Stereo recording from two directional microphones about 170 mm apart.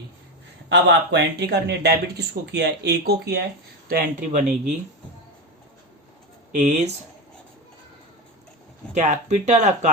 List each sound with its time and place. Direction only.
0.7 s speech: 90° right; by 3.4 s 70° right (ahead or behind)
3.8 s speech: 55° right (ahead or behind)
6.5 s speech: 45° right (ahead or behind)
9.0 s speech: 45° right (ahead or behind)